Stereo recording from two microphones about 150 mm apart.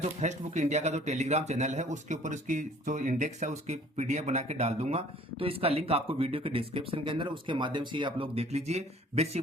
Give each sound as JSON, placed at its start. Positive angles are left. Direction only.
{"t": 0.0, "sound": "a man's voice", "side_deg": -50}